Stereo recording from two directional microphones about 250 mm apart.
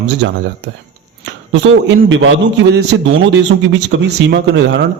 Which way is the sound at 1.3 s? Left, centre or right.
Right.